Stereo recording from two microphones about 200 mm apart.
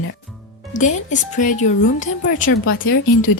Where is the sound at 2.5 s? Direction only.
90° left.